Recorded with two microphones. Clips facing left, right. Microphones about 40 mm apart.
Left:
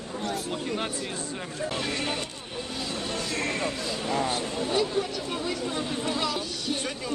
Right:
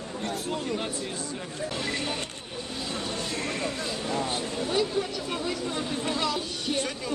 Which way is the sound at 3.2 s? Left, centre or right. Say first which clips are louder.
Left 2 dB; left.